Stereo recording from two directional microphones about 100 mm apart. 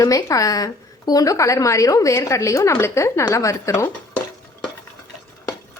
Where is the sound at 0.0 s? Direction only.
35° left (ahead or behind).